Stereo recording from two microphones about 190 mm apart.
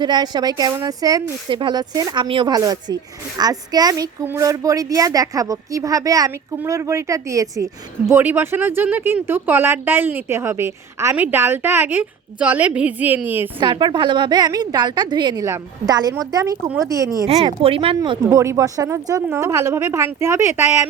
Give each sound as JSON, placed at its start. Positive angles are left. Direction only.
{"t": 0.0, "sound": "speech", "side_deg": -20}
{"t": 13.6, "sound": "a woman's voice", "side_deg": -25}
{"t": 17.2, "sound": "speech", "side_deg": -30}